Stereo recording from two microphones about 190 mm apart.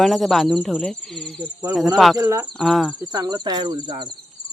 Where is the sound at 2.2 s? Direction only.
10° right (ahead or behind).